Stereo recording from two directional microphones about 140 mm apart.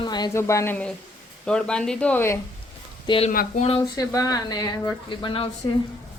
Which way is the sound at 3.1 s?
35° left (ahead or behind).